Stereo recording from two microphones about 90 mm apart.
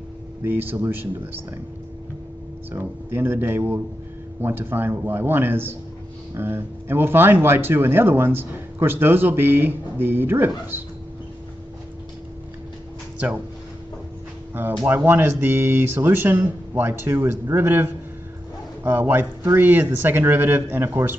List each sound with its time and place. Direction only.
0.4 s speech: 25° right (ahead or behind)
2.7 s speech: 25° right (ahead or behind)
14.9 s speech: 20° right (ahead or behind)